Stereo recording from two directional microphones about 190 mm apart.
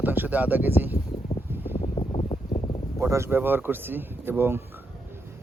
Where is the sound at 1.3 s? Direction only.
20° left (ahead or behind).